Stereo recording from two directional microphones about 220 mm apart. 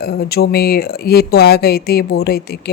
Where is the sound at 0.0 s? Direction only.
45° left (ahead or behind).